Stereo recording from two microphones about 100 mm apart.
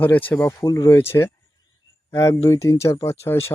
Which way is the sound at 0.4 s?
30° left (ahead or behind).